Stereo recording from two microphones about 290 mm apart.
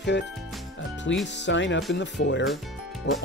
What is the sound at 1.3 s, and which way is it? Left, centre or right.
Speech, left.